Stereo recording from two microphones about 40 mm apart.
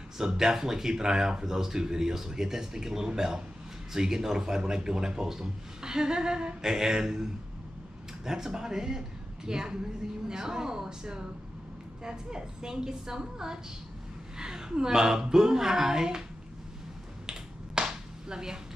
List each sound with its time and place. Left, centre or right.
0.2 s speech: centre
8.3 s speech: centre
17.3 s finger snapping: centre